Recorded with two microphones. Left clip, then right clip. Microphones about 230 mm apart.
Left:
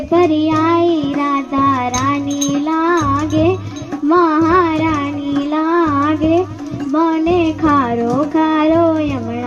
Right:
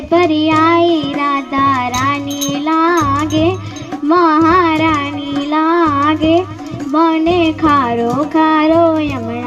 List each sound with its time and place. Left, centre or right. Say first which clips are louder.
0.1 s child singing: right 2 dB; right
4.1 s music: right 2 dB; right
5.5 s a sound: right 3 dB; right